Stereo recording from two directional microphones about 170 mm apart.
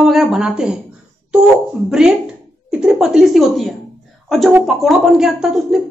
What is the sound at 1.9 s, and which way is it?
Speech, 5° right (ahead or behind).